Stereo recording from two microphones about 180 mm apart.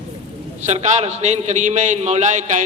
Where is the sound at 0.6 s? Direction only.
40° right (ahead or behind).